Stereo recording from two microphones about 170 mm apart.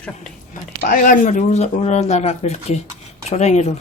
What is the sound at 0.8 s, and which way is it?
Speech, 55° left (ahead or behind).